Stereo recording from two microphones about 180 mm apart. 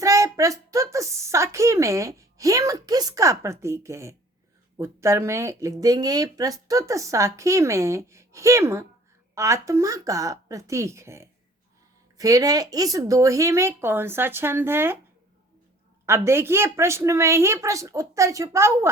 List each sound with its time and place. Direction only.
0.0 s a sound: 15° right (ahead or behind)
4.8 s speech: 15° right (ahead or behind)
16.0 s speech: 15° right (ahead or behind)